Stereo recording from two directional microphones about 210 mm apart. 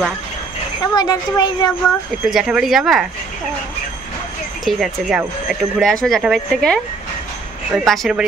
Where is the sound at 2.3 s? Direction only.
5° right (ahead or behind).